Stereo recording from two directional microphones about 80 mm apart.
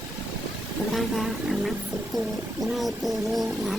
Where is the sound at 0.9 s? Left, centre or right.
Centre.